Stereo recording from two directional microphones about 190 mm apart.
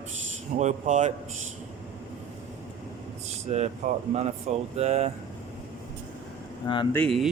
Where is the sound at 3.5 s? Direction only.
35° right (ahead or behind).